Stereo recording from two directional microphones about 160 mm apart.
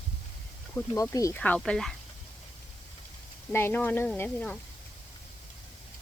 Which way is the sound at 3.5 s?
15° left (ahead or behind).